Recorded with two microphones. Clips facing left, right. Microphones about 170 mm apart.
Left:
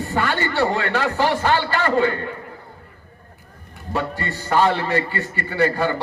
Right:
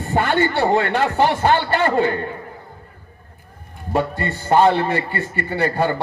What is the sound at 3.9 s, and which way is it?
Speech, 50° right (ahead or behind).